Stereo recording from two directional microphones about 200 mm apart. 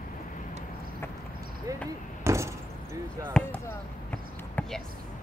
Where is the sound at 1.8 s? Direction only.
15° right (ahead or behind).